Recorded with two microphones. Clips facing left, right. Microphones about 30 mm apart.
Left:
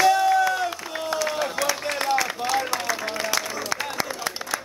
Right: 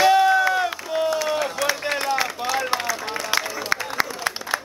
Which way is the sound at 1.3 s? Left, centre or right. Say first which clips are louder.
Right 2 dB; centre.